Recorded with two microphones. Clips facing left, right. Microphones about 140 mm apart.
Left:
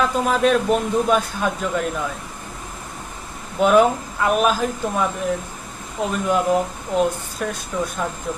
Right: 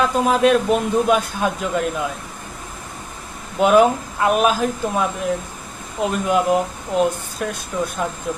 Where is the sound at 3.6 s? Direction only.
10° right (ahead or behind).